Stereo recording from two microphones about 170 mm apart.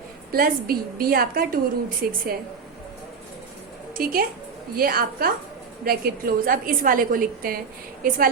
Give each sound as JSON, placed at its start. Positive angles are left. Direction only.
{"t": 0.3, "sound": "a woman's voice", "side_deg": -60}
{"t": 3.9, "sound": "a woman's voice", "side_deg": -60}